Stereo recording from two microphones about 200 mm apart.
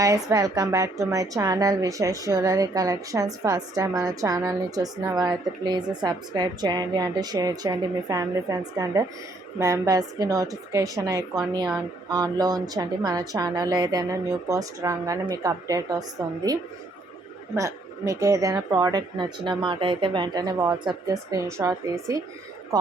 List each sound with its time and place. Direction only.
0.0 s a woman's voice: 15° right (ahead or behind)